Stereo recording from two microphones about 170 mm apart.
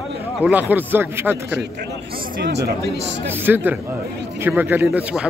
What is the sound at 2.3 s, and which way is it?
Speech, 80° right.